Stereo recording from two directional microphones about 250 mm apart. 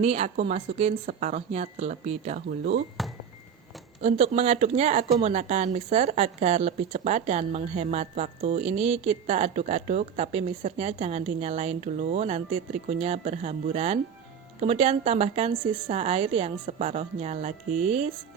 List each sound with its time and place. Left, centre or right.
0.0 s speech: right
3.0 s speech: centre
4.0 s speech: right